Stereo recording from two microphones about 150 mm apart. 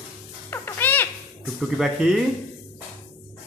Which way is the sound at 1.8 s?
Centre (ahead or behind).